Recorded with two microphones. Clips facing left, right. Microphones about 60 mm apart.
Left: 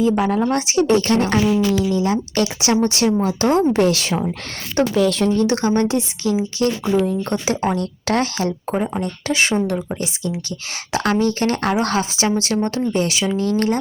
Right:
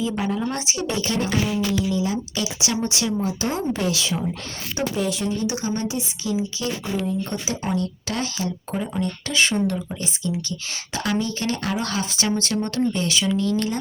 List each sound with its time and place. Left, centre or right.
0.0 s speech: left
0.6 s speech: left
4.8 s speech: left
9.6 s a woman's voice: left
12.5 s a woman's voice: left
13.3 s speech: left